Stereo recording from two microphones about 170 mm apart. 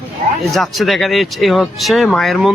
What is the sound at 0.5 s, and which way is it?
Speech, centre (ahead or behind).